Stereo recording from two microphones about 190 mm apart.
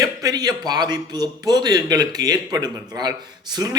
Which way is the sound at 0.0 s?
20° right (ahead or behind).